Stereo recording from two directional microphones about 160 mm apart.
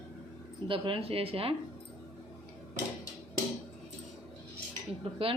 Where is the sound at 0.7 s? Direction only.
35° right (ahead or behind).